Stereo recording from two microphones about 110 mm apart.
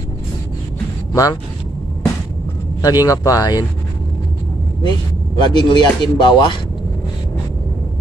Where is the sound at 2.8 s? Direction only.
35° left (ahead or behind).